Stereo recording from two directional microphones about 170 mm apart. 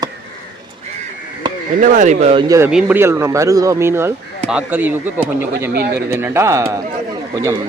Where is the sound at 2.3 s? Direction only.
30° right (ahead or behind).